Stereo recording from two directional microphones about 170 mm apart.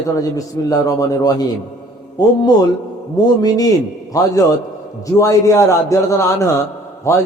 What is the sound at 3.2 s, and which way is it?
Speech, 20° left (ahead or behind).